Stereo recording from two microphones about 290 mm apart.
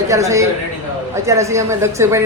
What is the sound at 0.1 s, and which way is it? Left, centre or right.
A man's voice, centre.